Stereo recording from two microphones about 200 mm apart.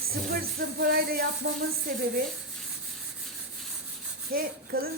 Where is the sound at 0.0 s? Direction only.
50° right (ahead or behind).